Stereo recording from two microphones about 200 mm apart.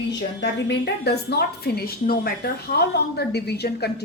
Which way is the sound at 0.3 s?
55° left (ahead or behind).